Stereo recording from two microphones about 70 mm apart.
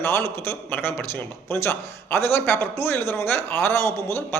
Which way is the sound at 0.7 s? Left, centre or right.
Left.